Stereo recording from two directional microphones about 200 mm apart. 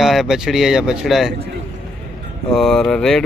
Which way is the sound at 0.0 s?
Centre (ahead or behind).